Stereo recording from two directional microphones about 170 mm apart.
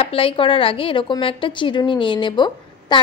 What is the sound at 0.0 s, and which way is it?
A woman's voice, 30° left (ahead or behind).